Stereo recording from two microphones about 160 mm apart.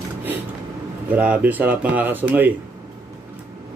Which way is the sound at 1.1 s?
10° right (ahead or behind).